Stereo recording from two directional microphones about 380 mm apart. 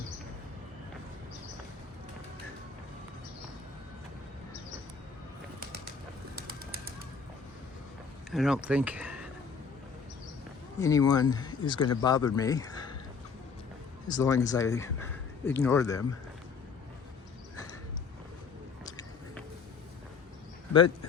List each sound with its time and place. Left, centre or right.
6.3 s bird: right
8.3 s speech: centre
10.8 s speech: centre
14.1 s speech: centre
18.9 s a sound: centre